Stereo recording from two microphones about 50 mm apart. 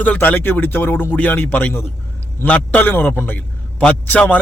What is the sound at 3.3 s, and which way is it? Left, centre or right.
A man's voice, left.